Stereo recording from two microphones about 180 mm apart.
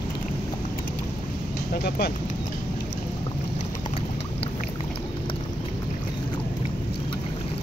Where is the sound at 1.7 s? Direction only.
60° left (ahead or behind).